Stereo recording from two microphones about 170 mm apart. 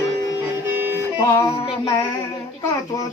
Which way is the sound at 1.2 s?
15° left (ahead or behind).